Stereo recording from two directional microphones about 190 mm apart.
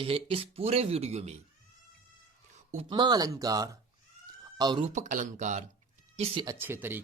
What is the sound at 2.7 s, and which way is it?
Speech, 25° right (ahead or behind).